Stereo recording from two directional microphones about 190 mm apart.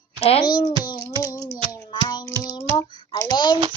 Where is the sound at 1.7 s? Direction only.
20° left (ahead or behind).